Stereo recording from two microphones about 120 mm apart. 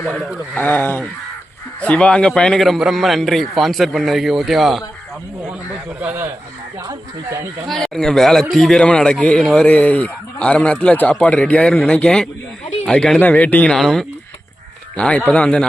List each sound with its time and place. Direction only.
0.1 s a man's voice: centre (ahead or behind)
0.5 s a man's voice: 15° left (ahead or behind); by 4.8 s centre (ahead or behind)
6.0 s speech: 15° right (ahead or behind)
7.7 s a man's voice: 5° left (ahead or behind)